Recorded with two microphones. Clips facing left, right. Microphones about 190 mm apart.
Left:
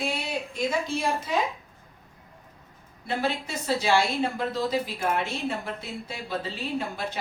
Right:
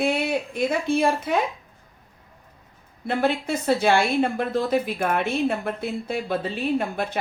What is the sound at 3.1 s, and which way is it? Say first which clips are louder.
Speech: right 6 dB; 55° right (ahead or behind).